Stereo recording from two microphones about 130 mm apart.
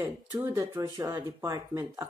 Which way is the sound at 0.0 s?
15° right (ahead or behind).